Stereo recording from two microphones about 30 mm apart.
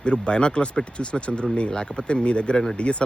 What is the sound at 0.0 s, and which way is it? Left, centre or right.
Speech, left.